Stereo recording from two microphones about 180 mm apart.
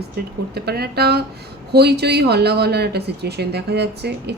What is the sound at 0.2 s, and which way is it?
Speech, 65° right (ahead or behind).